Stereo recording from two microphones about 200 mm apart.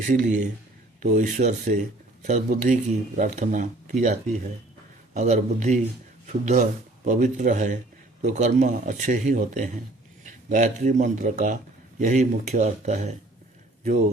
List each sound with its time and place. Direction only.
0.0 s speech: 40° right (ahead or behind)